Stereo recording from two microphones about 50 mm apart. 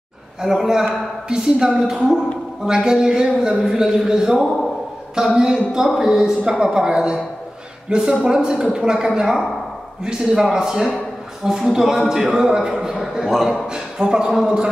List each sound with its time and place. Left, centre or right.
0.4 s a man's voice: centre
13.7 s a man's voice: centre